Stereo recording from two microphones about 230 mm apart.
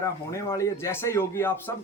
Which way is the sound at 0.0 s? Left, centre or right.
Centre.